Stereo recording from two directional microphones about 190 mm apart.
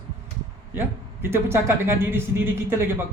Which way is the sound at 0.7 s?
10° right (ahead or behind).